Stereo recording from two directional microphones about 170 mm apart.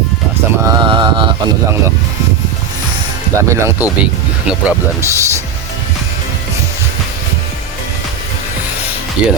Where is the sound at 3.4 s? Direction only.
15° right (ahead or behind).